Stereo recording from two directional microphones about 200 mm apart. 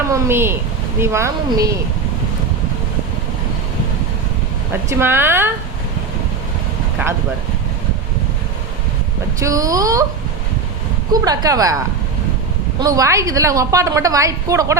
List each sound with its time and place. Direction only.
0.1 s a woman's voice: 10° right (ahead or behind)
4.7 s a woman's voice: 10° right (ahead or behind)
9.4 s a woman's voice: 15° right (ahead or behind)
11.1 s a woman's voice: 20° right (ahead or behind)
12.8 s a woman's voice: 15° right (ahead or behind)